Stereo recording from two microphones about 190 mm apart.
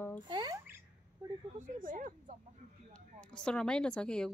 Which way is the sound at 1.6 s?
45° right (ahead or behind).